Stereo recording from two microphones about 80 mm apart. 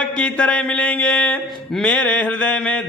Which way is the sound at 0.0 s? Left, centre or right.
Centre.